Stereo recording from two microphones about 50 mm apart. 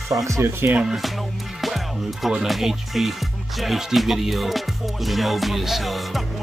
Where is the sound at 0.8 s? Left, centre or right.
Centre.